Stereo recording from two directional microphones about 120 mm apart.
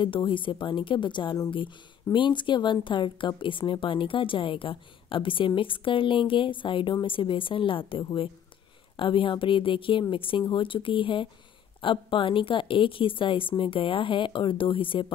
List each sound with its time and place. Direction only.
0.0 s a woman's voice: 40° left (ahead or behind)